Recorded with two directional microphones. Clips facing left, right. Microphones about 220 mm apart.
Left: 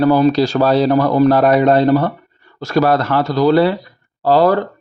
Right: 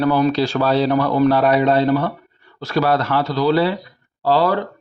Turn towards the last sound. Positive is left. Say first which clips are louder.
# left 4 dB
turn(degrees=45)  # may be behind; listen again after turning